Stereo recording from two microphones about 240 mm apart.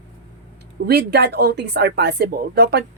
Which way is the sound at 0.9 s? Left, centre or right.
Right.